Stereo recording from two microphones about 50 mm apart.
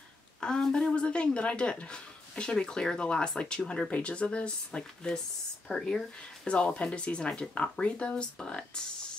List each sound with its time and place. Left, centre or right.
0.4 s speech: centre